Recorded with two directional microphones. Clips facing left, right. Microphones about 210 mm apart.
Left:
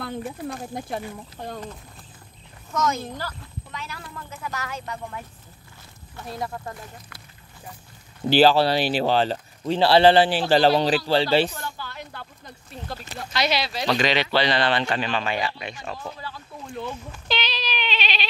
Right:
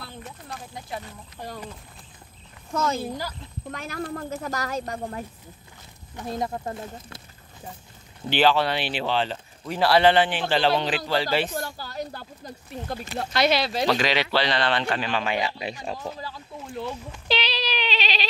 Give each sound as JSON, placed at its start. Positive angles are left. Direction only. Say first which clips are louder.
{"t": 0.6, "sound": "speech", "louder": "left 5 dB", "side_deg": 50}
{"t": 1.4, "sound": "speech", "louder": "left 2 dB", "side_deg": 10}
{"t": 2.7, "sound": "speech", "louder": "left 1 dB", "side_deg": -30}
{"t": 3.0, "sound": "speech", "louder": "right 2 dB", "side_deg": -10}
{"t": 3.7, "sound": "speech", "louder": "right 7 dB", "side_deg": -50}
{"t": 6.1, "sound": "speech", "louder": "right 3 dB", "side_deg": -20}
{"t": 8.3, "sound": "speech", "louder": "left 4 dB", "side_deg": 35}
{"t": 11.5, "sound": "speech", "louder": "right 4 dB", "side_deg": -40}
{"t": 13.3, "sound": "speech", "louder": "right 2 dB", "side_deg": -50}
{"t": 13.8, "sound": "speech", "louder": "left 3 dB", "side_deg": -5}
{"t": 15.6, "sound": "speech", "louder": "right 2 dB", "side_deg": -35}
{"t": 17.3, "sound": "bleat", "louder": "right 2 dB", "side_deg": -30}